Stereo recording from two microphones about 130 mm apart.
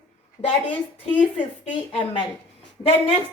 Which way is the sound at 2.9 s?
45° left (ahead or behind).